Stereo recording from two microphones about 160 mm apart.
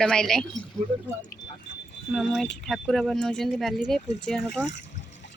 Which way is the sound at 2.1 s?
Centre (ahead or behind).